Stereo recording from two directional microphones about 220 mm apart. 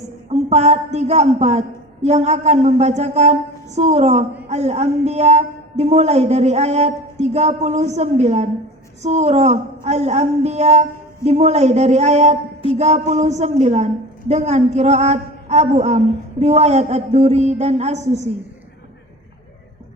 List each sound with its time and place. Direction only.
0.3 s a woman's voice: 30° right (ahead or behind)